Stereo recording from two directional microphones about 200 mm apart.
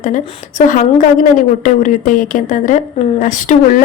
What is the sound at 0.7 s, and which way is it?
Speech, 40° left (ahead or behind).